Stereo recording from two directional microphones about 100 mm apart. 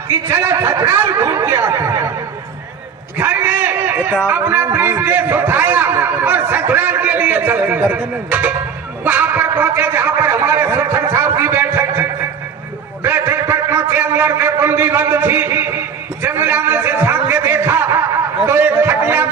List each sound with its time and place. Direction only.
0.3 s a man's voice: 25° right (ahead or behind)
1.7 s speech: 35° right (ahead or behind)
3.2 s a man's voice: 15° right (ahead or behind)
16.2 s a sound: 20° right (ahead or behind)
18.4 s a man's voice: 20° right (ahead or behind)